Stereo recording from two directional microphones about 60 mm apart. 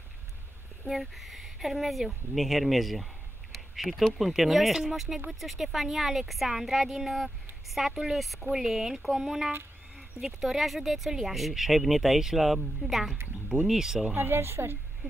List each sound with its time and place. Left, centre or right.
0.8 s speech: centre
14.1 s a woman's voice: right